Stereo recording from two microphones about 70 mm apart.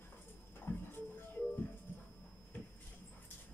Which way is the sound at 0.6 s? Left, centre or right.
Left.